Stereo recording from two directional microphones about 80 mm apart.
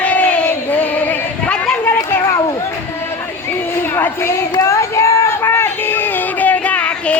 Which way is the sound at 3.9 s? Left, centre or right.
Left.